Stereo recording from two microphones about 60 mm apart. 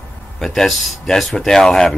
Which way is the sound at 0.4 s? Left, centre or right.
Centre.